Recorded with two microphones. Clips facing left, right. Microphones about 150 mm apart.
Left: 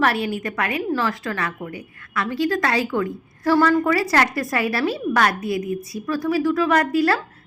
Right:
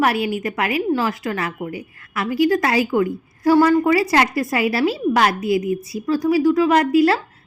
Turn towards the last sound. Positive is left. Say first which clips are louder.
# right 4 dB
turn(degrees=-20)  # may be behind; listen again after turning